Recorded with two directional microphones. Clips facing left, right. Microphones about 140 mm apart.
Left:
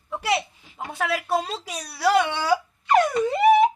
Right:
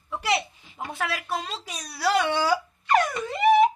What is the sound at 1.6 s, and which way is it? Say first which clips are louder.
A child's voice: left 4 dB; 10° left (ahead or behind).